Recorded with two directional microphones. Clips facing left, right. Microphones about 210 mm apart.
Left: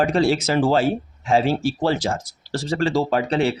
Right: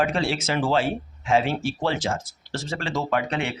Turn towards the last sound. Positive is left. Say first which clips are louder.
# left 5 dB
turn(degrees=35)  # may be behind; listen again after turning